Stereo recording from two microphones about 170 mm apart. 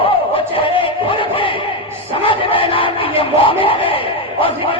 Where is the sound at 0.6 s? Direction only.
30° left (ahead or behind).